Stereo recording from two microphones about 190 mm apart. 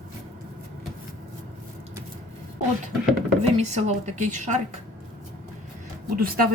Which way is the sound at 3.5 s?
35° right (ahead or behind).